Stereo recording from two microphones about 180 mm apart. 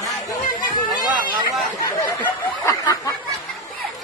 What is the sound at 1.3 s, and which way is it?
Chatter, 25° right (ahead or behind).